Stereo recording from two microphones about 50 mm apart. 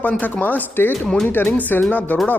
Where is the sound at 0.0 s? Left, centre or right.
Left.